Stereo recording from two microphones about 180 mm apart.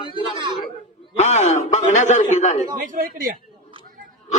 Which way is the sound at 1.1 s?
40° left (ahead or behind).